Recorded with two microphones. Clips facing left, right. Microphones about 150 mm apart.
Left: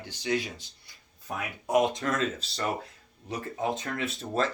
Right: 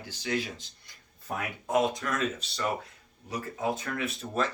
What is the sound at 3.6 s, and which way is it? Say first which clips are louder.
Speech: even; 25° left (ahead or behind).